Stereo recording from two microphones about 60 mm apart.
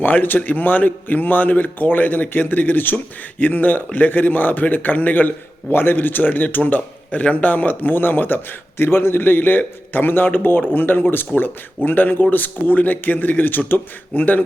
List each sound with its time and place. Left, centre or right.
0.0 s a man's voice: left